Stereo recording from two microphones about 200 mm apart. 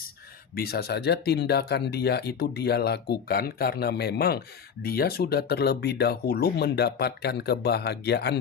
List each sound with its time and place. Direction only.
0.5 s speech: 50° left (ahead or behind)